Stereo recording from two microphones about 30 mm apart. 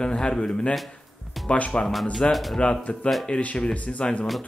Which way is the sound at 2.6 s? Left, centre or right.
Left.